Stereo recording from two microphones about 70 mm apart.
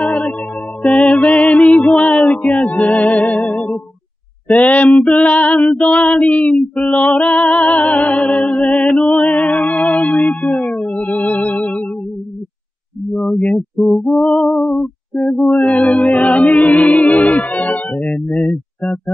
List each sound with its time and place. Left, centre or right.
0.0 s music: centre
4.9 s female singing: centre
5.2 s music: left
6.9 s female singing: centre
7.2 s music: centre
13.1 s mantra: centre
14.4 s music: centre